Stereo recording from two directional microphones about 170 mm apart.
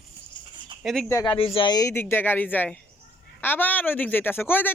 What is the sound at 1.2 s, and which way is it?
Speech, 30° left (ahead or behind).